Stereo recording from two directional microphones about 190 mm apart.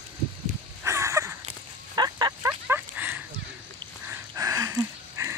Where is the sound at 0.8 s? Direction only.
15° right (ahead or behind).